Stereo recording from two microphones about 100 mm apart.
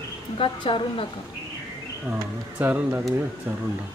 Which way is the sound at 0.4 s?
60° left (ahead or behind).